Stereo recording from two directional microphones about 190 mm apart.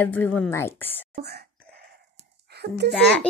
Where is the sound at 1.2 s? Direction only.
60° right (ahead or behind).